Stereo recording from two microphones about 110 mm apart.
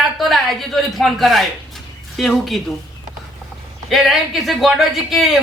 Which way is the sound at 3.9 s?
Centre (ahead or behind).